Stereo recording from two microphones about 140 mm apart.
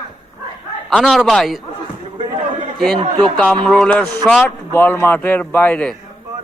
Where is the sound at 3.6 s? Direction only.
5° left (ahead or behind).